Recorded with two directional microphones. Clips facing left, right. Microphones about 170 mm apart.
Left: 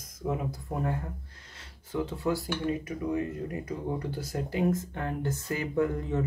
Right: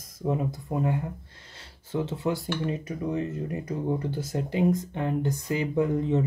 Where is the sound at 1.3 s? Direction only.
30° right (ahead or behind).